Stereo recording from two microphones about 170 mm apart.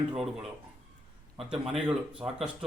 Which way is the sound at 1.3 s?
35° right (ahead or behind).